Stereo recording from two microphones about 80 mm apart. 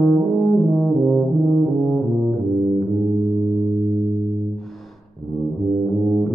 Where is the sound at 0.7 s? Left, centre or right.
Centre.